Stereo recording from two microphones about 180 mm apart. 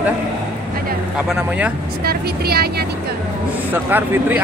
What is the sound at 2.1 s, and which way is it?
Speech, 60° right (ahead or behind).